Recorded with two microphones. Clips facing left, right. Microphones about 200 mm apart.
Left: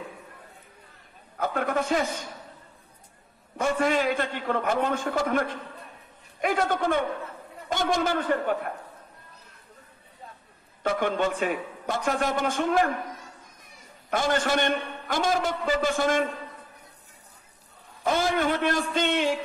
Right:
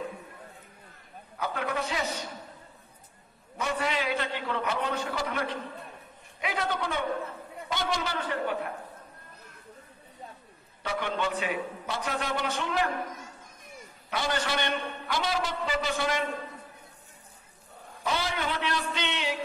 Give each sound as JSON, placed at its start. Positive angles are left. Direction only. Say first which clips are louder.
{"t": 1.4, "sound": "a man's voice", "louder": "left 5 dB", "side_deg": 50}
{"t": 3.5, "sound": "a man's voice", "louder": "left 6 dB", "side_deg": 50}
{"t": 10.8, "sound": "a man's voice", "louder": "left 6 dB", "side_deg": 50}
{"t": 14.1, "sound": "a man's voice", "louder": "left 5 dB", "side_deg": 50}
{"t": 18.0, "sound": "a man's voice", "louder": "left 7 dB", "side_deg": 50}